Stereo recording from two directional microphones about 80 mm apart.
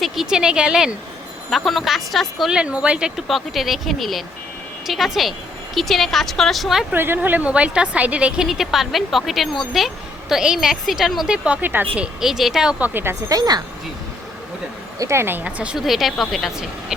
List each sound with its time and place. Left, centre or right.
0.0 s a woman's voice: centre
3.2 s a woman's voice: centre
6.9 s a woman's voice: right; by 11.3 s centre
11.4 s speech: centre
12.2 s a woman's voice: centre
12.8 s speech: right
13.2 s speech: right
14.9 s a woman's voice: right
15.4 s a woman's voice: centre
15.8 s a woman's voice: centre